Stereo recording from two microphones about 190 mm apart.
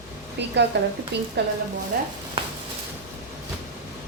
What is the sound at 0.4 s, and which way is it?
Speech, 65° right (ahead or behind).